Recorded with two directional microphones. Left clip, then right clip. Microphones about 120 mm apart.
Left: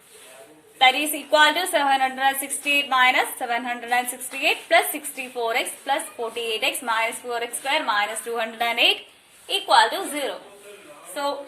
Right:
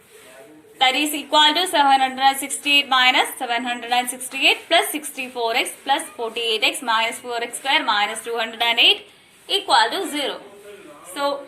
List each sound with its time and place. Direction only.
0.8 s a woman's voice: 40° left (ahead or behind)